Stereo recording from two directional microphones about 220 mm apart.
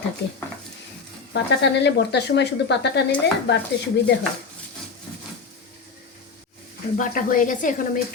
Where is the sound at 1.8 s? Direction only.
50° left (ahead or behind).